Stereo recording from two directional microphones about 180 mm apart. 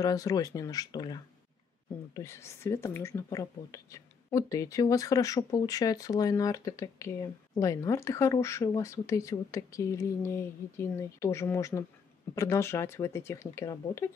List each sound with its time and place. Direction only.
0.0 s speech: 20° left (ahead or behind)